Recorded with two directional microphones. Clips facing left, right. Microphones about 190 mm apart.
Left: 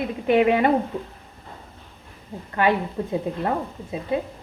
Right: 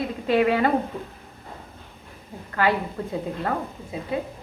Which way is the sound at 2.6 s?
20° left (ahead or behind).